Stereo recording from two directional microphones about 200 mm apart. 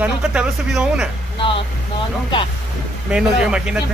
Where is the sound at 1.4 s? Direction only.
25° left (ahead or behind).